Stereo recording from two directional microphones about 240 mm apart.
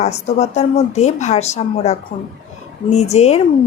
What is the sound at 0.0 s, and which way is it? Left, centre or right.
Speech, left.